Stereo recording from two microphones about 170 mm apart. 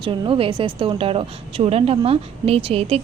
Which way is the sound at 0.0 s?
30° right (ahead or behind).